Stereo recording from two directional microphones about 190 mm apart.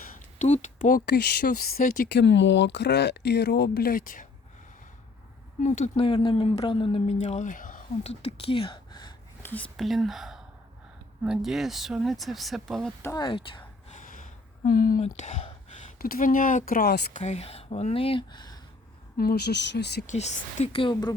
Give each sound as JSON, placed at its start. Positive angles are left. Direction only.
{"t": 0.0, "sound": "a sound", "side_deg": 35}
{"t": 1.0, "sound": "speech", "side_deg": 55}
{"t": 2.0, "sound": "speech", "side_deg": 70}
{"t": 5.6, "sound": "speech", "side_deg": 40}
{"t": 9.4, "sound": "speech", "side_deg": 10}
{"t": 13.0, "sound": "speech", "side_deg": 15}
{"t": 13.2, "sound": "a woman's voice", "side_deg": 25}
{"t": 13.9, "sound": "a sound", "side_deg": 45}
{"t": 15.0, "sound": "speech", "side_deg": 35}
{"t": 16.0, "sound": "speech", "side_deg": 50}
{"t": 17.2, "sound": "speech", "side_deg": 35}
{"t": 19.1, "sound": "speech", "side_deg": 55}
{"t": 20.1, "sound": "speech", "side_deg": 35}